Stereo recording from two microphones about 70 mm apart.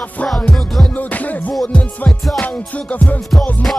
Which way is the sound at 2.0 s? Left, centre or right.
Centre.